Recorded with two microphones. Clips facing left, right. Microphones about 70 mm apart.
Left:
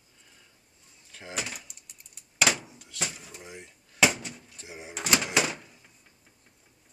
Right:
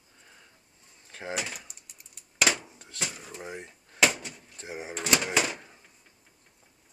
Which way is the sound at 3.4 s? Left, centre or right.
Right.